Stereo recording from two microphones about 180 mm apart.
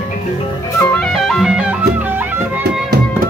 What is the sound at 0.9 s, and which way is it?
Music, centre (ahead or behind).